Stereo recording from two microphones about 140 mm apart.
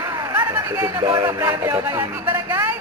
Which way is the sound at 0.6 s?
20° right (ahead or behind).